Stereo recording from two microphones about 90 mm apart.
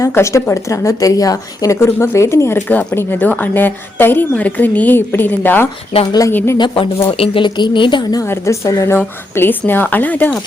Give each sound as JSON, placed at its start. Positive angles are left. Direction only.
{"t": 0.0, "sound": "speech", "side_deg": 30}
{"t": 2.6, "sound": "a woman's voice", "side_deg": 20}
{"t": 6.1, "sound": "speech", "side_deg": 40}
{"t": 6.3, "sound": "a woman's voice", "side_deg": 25}
{"t": 6.6, "sound": "a woman's voice", "side_deg": 90}
{"t": 8.2, "sound": "a woman's voice", "side_deg": 35}